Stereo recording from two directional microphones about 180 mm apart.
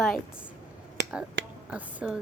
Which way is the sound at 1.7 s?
5° right (ahead or behind).